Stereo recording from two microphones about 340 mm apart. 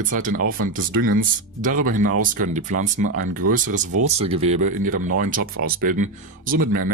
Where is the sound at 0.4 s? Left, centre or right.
Right.